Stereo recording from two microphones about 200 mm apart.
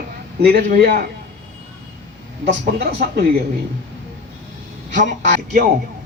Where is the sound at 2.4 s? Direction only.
55° right (ahead or behind).